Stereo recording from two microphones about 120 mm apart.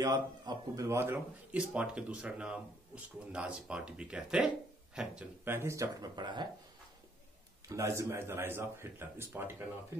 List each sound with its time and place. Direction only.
0.0 s a man's voice: 30° right (ahead or behind)
6.1 s speech: 40° right (ahead or behind)
7.6 s a man's voice: 25° right (ahead or behind)